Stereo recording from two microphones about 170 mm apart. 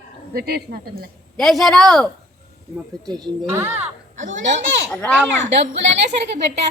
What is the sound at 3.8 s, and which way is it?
Speech, 45° right (ahead or behind).